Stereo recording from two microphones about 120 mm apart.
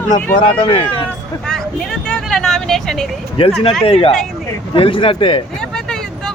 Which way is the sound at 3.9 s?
50° left (ahead or behind).